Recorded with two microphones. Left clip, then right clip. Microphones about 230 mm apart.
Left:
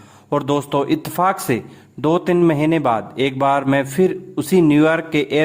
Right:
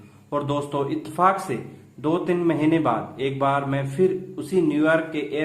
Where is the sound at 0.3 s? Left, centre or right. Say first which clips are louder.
Left 6 dB; left.